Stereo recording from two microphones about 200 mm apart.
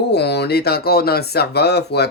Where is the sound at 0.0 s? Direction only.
55° left (ahead or behind).